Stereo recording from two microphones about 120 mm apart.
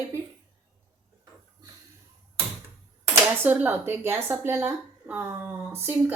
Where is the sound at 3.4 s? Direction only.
15° right (ahead or behind).